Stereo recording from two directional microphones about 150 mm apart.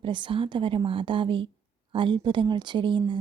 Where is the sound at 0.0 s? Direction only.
35° right (ahead or behind).